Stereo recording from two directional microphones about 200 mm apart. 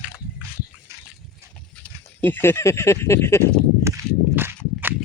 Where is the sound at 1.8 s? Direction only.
10° left (ahead or behind).